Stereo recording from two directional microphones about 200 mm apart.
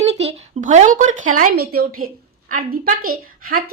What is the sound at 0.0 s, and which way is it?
A woman's voice, 30° right (ahead or behind).